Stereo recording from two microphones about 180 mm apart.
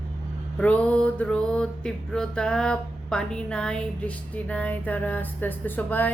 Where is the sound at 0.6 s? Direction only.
5° left (ahead or behind).